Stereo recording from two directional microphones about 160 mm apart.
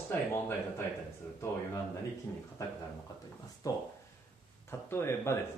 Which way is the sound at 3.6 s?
20° left (ahead or behind).